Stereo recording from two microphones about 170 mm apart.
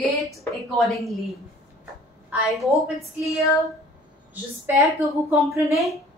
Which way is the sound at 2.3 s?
Centre (ahead or behind).